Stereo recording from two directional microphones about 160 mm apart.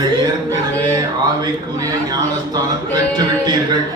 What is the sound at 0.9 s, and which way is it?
Speech, 25° right (ahead or behind).